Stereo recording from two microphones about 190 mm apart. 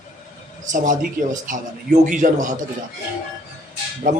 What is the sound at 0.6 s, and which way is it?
Speech, 40° right (ahead or behind).